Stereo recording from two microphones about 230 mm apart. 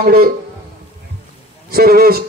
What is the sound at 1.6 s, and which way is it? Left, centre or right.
Speech, right.